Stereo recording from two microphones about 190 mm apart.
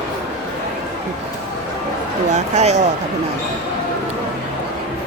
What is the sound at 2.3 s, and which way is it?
Speech, 35° right (ahead or behind).